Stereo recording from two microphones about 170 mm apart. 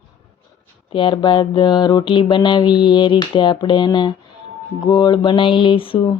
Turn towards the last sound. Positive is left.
turn(degrees=30)  # may be behind; listen again after turning